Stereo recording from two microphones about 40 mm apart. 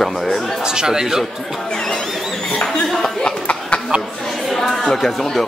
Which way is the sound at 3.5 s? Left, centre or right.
Left.